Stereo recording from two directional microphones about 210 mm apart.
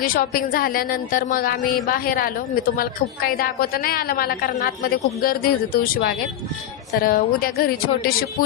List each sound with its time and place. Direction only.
0.0 s a woman's voice: 45° left (ahead or behind)